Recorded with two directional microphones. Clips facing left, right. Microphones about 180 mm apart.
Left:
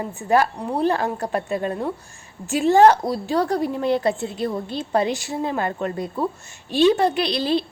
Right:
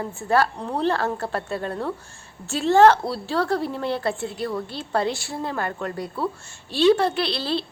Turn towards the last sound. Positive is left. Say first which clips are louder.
# left 4 dB
turn(degrees=15)  # may be behind; listen again after turning